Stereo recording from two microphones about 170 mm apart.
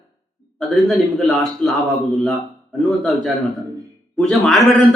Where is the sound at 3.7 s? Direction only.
20° right (ahead or behind).